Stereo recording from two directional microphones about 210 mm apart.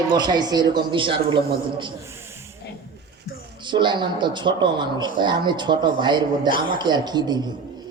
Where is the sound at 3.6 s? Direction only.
20° right (ahead or behind).